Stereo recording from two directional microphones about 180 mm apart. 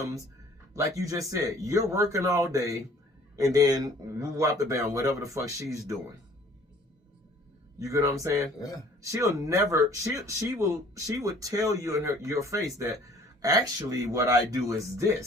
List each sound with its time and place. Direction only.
0.7 s speech: 20° right (ahead or behind)
7.8 s speech: 15° right (ahead or behind)
14.0 s speech: 20° right (ahead or behind)